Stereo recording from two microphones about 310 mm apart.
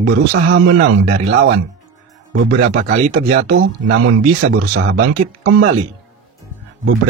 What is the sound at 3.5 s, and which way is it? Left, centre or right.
Speech, right.